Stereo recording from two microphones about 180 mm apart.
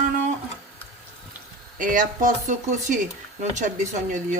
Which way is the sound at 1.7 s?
45° right (ahead or behind).